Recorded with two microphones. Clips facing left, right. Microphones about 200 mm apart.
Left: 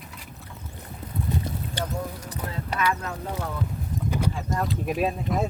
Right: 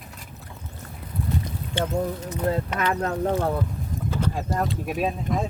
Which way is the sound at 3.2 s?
50° right (ahead or behind).